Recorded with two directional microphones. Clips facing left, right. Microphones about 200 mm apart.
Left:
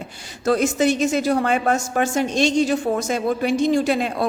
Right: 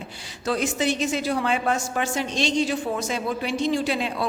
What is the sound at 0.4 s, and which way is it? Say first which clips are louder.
A woman's voice: left 6 dB; 45° left (ahead or behind).